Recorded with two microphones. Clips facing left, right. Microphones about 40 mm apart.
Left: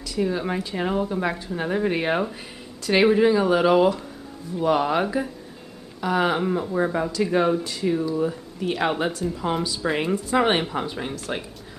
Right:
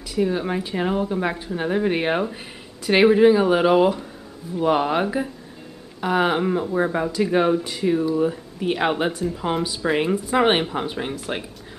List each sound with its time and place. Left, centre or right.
0.1 s speech: centre